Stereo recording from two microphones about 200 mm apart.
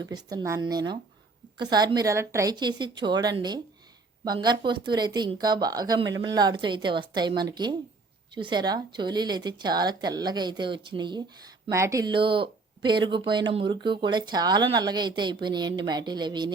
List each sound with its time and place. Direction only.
0.0 s speech: 20° right (ahead or behind)